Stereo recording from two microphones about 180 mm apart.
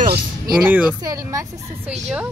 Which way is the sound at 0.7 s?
15° right (ahead or behind).